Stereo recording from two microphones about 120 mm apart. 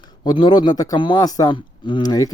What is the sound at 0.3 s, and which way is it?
Speech, 40° left (ahead or behind).